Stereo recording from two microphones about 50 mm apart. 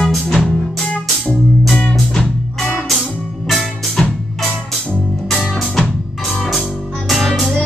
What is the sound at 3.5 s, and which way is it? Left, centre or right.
Music, centre.